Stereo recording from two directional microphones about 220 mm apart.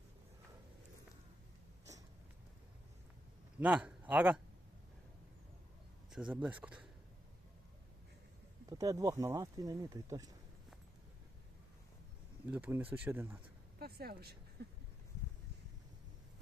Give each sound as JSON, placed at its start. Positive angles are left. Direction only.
{"t": 3.6, "sound": "speech", "side_deg": -5}
{"t": 6.3, "sound": "speech", "side_deg": -5}
{"t": 8.8, "sound": "speech", "side_deg": -15}
{"t": 12.5, "sound": "speech", "side_deg": -10}
{"t": 13.7, "sound": "speech", "side_deg": -45}